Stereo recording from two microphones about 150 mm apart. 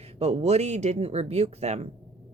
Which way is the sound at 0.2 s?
45° right (ahead or behind).